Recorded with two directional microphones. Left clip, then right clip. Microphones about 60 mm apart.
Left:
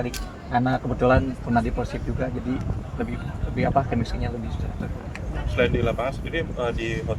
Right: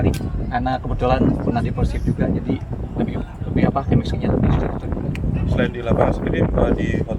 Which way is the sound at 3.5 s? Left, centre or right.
Centre.